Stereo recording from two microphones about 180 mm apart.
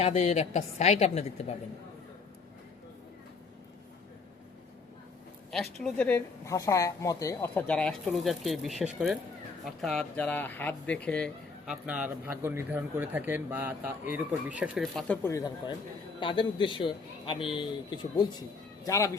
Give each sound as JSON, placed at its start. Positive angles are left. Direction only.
{"t": 0.0, "sound": "a woman's voice", "side_deg": 35}
{"t": 5.5, "sound": "a man's voice", "side_deg": 0}